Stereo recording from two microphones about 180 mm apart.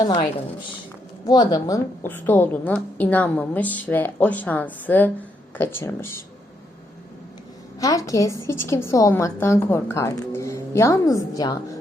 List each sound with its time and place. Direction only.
1.3 s a woman's voice: 25° left (ahead or behind)
7.8 s a woman's voice: 20° left (ahead or behind)